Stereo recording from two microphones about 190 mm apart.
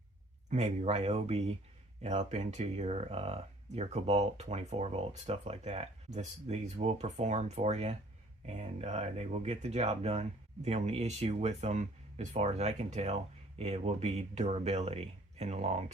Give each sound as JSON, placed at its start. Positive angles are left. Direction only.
{"t": 0.5, "sound": "speech", "side_deg": -35}